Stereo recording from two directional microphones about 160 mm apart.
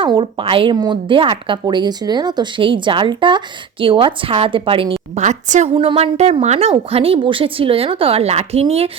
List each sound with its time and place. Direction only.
0.0 s a woman's voice: 30° right (ahead or behind)
5.2 s a woman's voice: 50° right (ahead or behind)
5.7 s a woman's voice: 35° right (ahead or behind)